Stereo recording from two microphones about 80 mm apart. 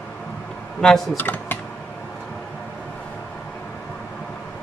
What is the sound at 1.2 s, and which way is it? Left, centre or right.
Speech, left.